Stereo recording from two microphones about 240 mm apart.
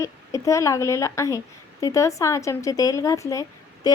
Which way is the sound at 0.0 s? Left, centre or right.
Centre.